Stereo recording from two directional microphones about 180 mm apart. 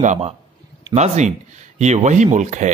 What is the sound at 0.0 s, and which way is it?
A man's voice, 40° right (ahead or behind).